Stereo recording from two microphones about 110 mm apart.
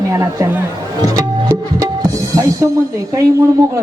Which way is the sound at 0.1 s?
25° right (ahead or behind).